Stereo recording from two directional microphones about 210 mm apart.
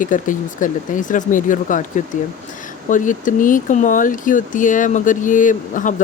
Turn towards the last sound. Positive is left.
turn(degrees=40)  # may be behind; listen again after turning